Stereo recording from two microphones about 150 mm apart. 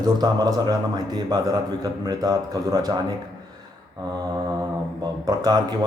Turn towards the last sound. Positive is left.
turn(degrees=-25)  # may be behind; listen again after turning